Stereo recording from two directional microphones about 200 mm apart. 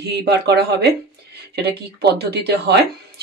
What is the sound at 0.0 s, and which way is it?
Speech, 55° right (ahead or behind).